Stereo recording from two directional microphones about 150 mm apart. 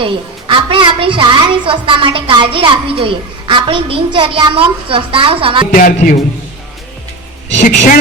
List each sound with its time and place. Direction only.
0.0 s a woman's voice: 35° right (ahead or behind)
5.7 s a man's voice: 60° left (ahead or behind)
7.5 s a man's voice: 55° left (ahead or behind)